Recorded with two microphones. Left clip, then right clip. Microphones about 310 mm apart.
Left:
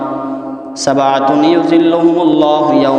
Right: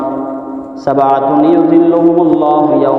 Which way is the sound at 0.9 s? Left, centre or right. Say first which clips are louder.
Right 1 dB; left.